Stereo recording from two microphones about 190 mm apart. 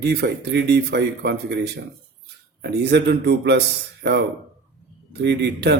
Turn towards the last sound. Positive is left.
turn(degrees=-65)  # may be behind; listen again after turning